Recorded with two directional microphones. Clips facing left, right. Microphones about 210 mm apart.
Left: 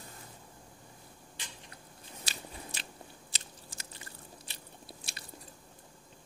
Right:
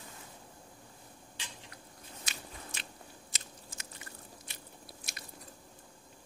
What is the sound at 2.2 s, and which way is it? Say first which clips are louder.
Biting: left 3 dB; 35° left (ahead or behind).